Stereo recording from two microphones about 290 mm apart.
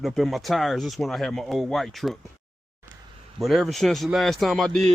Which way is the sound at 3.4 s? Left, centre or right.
Centre.